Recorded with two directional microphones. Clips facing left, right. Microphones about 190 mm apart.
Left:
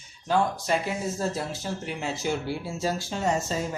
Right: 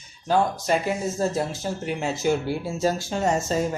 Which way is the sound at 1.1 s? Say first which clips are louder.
Right 5 dB; 45° right (ahead or behind).